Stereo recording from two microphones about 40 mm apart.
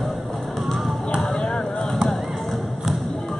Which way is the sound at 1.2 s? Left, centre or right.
Centre.